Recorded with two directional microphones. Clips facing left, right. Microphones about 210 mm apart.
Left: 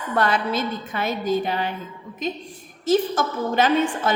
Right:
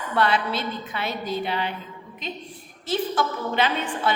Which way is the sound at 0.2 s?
45° left (ahead or behind).